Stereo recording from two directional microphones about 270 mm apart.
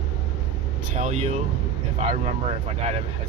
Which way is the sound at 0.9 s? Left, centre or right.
Right.